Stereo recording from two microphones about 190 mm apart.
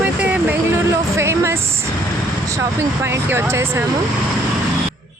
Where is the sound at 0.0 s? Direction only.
10° right (ahead or behind).